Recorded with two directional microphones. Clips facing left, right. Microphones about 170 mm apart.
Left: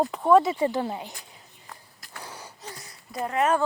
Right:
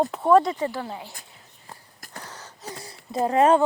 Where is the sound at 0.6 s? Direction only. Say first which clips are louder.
Left 3 dB; 20° left (ahead or behind).